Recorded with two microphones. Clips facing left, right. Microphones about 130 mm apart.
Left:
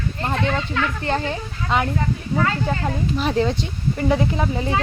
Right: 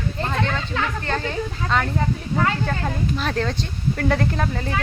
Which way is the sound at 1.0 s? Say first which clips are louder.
Left 2 dB; 20° left (ahead or behind).